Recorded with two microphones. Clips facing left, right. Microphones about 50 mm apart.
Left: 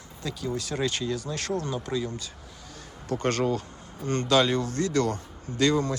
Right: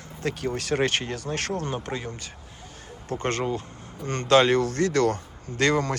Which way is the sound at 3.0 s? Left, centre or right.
Right.